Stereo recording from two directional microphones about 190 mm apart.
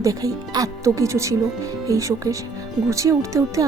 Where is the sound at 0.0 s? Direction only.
20° right (ahead or behind).